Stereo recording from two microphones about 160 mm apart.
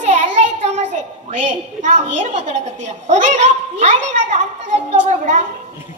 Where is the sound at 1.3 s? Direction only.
50° right (ahead or behind).